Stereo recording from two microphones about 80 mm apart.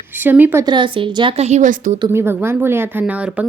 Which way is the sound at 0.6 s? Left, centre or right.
Right.